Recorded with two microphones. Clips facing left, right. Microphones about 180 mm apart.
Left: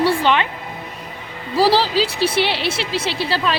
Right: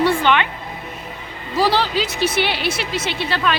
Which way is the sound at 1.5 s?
30° left (ahead or behind).